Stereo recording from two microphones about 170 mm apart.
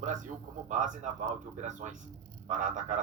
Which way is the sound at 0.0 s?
45° right (ahead or behind).